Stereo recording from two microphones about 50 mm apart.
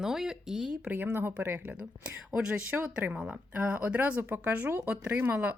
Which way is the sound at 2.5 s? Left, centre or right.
Right.